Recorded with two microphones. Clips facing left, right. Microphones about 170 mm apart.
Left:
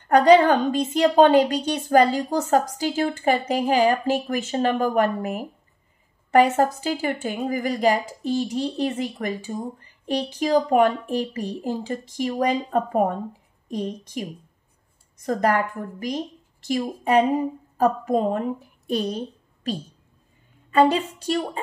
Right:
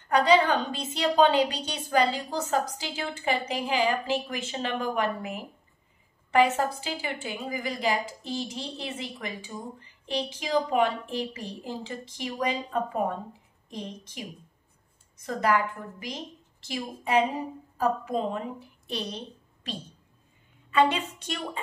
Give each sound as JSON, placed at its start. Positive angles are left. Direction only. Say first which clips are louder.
{"t": 0.1, "sound": "a woman's voice", "louder": "left 7 dB", "side_deg": 50}
{"t": 15.2, "sound": "a woman's voice", "louder": "left 4 dB", "side_deg": 45}